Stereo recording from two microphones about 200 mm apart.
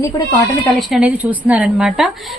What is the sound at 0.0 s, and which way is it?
Speech, 15° left (ahead or behind).